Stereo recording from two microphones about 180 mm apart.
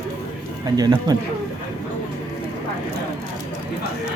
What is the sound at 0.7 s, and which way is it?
Speech, 20° right (ahead or behind).